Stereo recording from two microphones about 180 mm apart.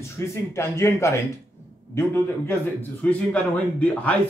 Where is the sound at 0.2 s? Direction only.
15° left (ahead or behind).